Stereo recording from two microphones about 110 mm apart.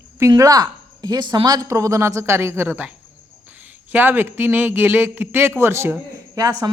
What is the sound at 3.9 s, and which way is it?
Speech, 15° right (ahead or behind).